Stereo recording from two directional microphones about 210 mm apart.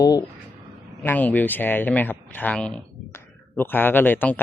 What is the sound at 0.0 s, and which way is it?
Speech, 15° left (ahead or behind).